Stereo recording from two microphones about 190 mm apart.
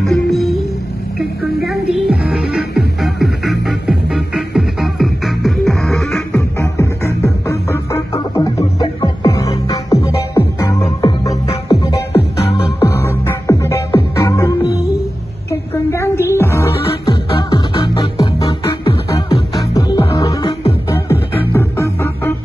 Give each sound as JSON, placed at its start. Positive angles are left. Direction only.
{"t": 0.0, "sound": "music", "side_deg": 0}
{"t": 6.8, "sound": "music", "side_deg": 15}
{"t": 15.7, "sound": "music", "side_deg": 15}